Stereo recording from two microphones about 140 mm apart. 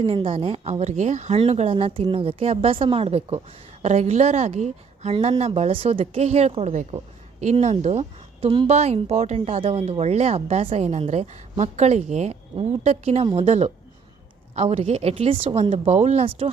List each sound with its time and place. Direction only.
0.0 s speech: 40° right (ahead or behind)
15.9 s speech: 50° right (ahead or behind)